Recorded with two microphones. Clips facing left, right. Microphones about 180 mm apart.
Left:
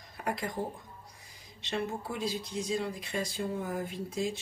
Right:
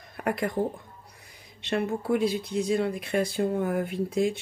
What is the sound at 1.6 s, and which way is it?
Speech, 60° right (ahead or behind).